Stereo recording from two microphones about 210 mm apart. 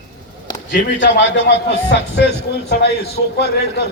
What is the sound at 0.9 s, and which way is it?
A man's voice, 55° left (ahead or behind).